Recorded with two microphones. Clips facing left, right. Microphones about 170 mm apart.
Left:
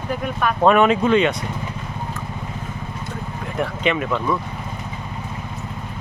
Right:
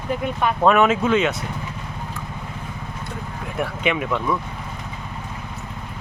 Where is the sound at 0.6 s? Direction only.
5° right (ahead or behind).